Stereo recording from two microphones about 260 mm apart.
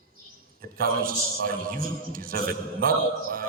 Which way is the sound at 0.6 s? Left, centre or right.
Right.